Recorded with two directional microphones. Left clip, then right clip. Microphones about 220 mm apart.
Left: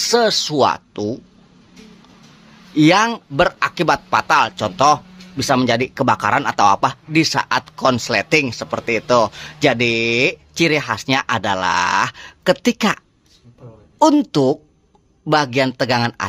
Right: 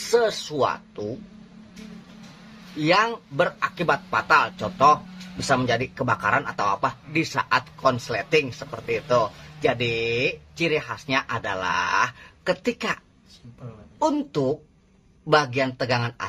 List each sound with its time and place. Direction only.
0.1 s speech: 45° left (ahead or behind)
2.8 s speech: 50° left (ahead or behind)
13.9 s speech: 50° left (ahead or behind)